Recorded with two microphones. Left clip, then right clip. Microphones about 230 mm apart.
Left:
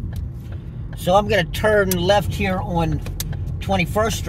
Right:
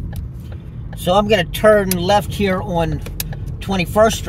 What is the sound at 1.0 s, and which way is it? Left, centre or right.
Speech, right.